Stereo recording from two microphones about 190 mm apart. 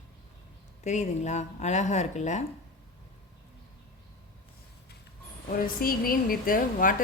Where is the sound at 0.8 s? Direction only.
40° left (ahead or behind).